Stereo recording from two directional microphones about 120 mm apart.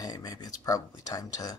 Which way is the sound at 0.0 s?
35° left (ahead or behind).